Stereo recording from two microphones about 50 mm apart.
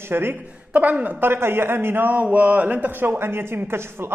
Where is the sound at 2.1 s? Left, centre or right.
Right.